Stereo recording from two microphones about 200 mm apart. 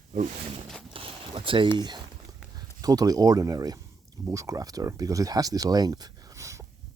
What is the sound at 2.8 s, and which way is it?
Speech, 20° right (ahead or behind).